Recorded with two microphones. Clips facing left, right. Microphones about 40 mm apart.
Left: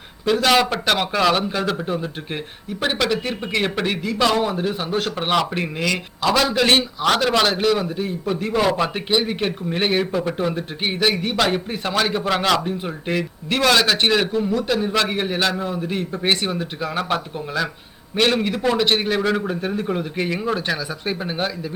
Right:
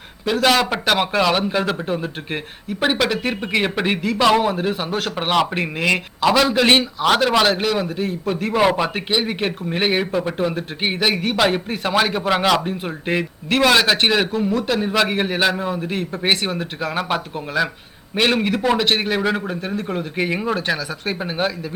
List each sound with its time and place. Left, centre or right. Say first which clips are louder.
0.3 s speech: even; centre
5.1 s speech: right 4 dB; centre
6.3 s speech: right 1 dB; centre
8.5 s a man's voice: right 3 dB; centre
8.8 s speech: even; centre
20.6 s speech: right 2 dB; centre